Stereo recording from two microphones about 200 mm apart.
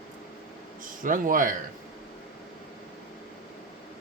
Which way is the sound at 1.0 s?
40° right (ahead or behind).